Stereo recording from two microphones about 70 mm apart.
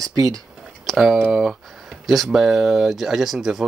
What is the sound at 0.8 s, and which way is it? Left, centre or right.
Speech, centre.